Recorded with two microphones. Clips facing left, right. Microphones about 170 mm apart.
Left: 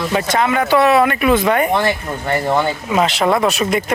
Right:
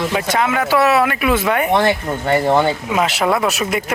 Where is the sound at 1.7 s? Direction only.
25° right (ahead or behind).